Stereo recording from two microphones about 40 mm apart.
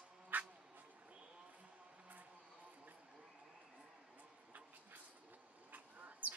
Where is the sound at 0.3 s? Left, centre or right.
Right.